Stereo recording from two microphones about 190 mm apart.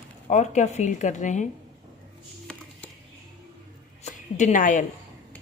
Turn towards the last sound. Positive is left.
turn(degrees=45)  # may be behind; listen again after turning